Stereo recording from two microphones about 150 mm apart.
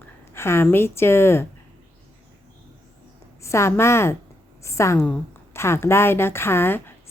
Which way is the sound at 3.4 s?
20° left (ahead or behind).